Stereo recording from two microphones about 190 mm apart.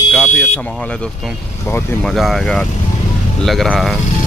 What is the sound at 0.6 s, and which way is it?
Speech, 5° left (ahead or behind).